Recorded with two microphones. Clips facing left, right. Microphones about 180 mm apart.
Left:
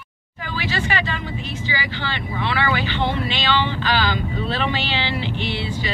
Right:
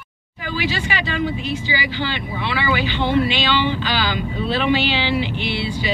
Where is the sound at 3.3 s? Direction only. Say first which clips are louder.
Right 2 dB; 10° right (ahead or behind).